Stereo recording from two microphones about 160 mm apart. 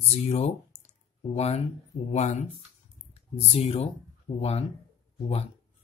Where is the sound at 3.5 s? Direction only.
40° left (ahead or behind).